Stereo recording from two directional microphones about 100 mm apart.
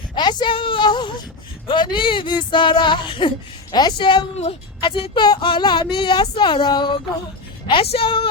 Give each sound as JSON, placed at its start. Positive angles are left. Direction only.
{"t": 0.2, "sound": "a woman's voice", "side_deg": 45}
{"t": 0.5, "sound": "a woman's voice", "side_deg": 60}
{"t": 5.2, "sound": "speech", "side_deg": 50}
{"t": 7.7, "sound": "a woman's voice", "side_deg": 70}